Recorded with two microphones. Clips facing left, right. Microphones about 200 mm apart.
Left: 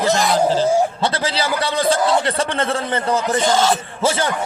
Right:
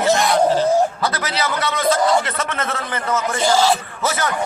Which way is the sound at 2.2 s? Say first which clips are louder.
Left 4 dB; 30° left (ahead or behind).